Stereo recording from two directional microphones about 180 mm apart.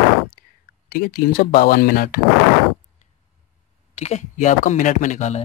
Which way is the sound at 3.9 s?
35° left (ahead or behind).